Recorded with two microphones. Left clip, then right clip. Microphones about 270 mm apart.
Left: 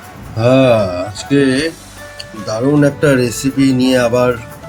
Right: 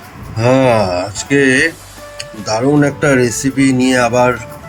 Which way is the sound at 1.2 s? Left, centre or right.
Centre.